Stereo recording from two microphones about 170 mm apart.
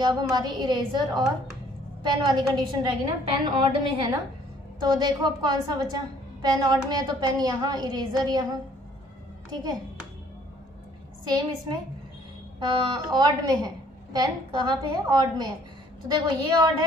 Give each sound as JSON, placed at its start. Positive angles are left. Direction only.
{"t": 0.0, "sound": "a woman's voice", "side_deg": -25}
{"t": 11.2, "sound": "a woman's voice", "side_deg": -25}